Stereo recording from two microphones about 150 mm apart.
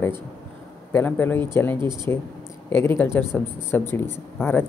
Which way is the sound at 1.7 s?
30° right (ahead or behind).